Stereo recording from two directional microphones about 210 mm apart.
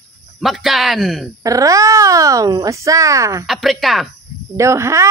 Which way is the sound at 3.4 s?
Centre (ahead or behind).